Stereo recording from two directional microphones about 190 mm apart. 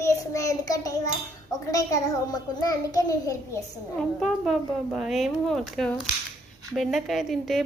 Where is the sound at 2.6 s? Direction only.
20° left (ahead or behind).